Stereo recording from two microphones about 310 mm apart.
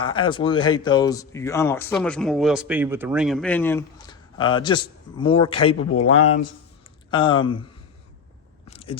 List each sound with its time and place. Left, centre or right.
0.0 s speech: centre
5.9 s speech: left
7.1 s speech: centre
8.6 s a sound: centre